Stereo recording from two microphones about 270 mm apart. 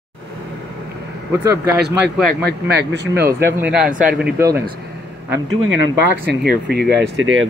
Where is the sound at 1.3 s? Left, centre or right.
Centre.